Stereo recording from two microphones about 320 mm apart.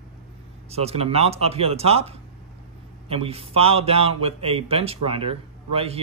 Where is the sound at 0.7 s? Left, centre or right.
Centre.